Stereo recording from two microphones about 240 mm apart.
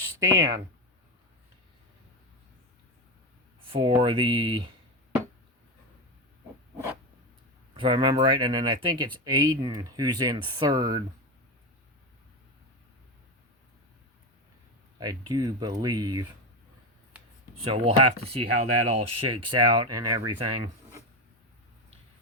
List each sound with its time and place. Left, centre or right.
0.2 s speech: centre
3.7 s speech: right
7.7 s speech: right
14.9 s speech: centre
17.6 s speech: right